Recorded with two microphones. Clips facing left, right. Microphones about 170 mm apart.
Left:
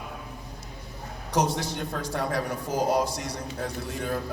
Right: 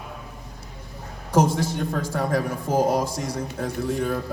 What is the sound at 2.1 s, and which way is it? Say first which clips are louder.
A man's voice: right 3 dB; 50° right (ahead or behind).